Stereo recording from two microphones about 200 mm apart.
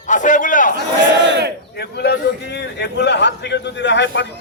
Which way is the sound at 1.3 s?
60° right (ahead or behind).